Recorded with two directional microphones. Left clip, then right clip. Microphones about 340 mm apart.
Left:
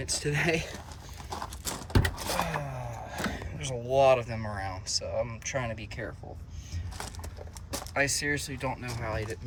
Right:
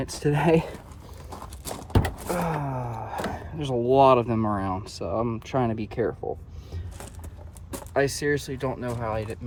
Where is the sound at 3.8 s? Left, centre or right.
Right.